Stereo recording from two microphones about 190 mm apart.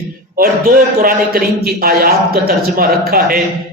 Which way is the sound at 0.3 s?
50° right (ahead or behind).